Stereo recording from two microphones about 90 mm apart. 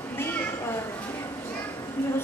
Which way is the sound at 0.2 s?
25° left (ahead or behind).